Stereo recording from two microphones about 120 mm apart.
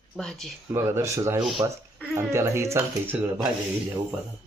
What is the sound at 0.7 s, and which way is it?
Speech, 25° right (ahead or behind).